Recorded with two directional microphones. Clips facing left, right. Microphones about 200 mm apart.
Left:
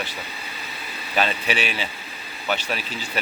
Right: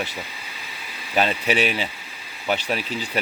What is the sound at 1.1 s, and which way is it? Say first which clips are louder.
Speech: right 2 dB; 20° right (ahead or behind).